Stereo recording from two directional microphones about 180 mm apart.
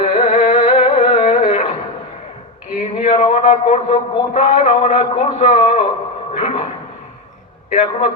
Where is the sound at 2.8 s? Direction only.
30° left (ahead or behind).